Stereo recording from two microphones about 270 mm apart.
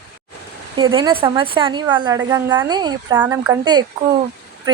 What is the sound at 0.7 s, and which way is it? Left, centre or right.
Speech, centre.